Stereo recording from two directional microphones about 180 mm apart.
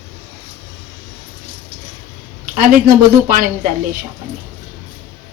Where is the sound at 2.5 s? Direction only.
50° right (ahead or behind).